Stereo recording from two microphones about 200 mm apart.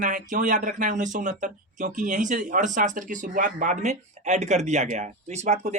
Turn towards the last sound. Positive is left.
turn(degrees=-35)  # may be behind; listen again after turning